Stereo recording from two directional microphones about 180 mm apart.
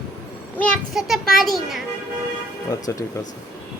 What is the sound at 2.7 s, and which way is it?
Speech, 20° left (ahead or behind).